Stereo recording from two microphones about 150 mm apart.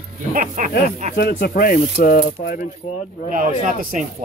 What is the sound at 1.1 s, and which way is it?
Speech, 80° left.